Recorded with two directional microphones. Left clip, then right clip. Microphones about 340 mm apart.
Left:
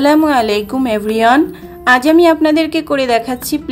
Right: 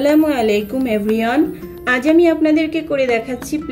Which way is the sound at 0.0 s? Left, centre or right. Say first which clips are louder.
Left 3 dB; left.